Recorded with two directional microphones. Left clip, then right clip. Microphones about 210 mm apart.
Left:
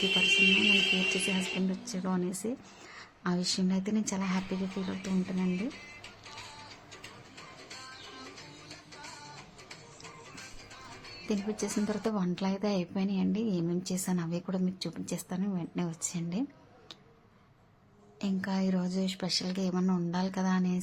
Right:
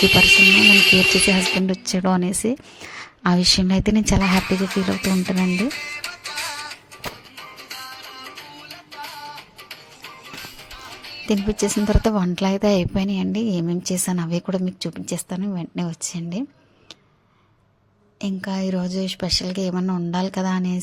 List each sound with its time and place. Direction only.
0.0 s speech: 60° right (ahead or behind)
1.7 s a woman's voice: 45° right (ahead or behind)
4.9 s speech: 60° right (ahead or behind)
7.3 s music: 45° right (ahead or behind)
11.3 s a woman's voice: 40° right (ahead or behind)
18.2 s a woman's voice: 30° right (ahead or behind)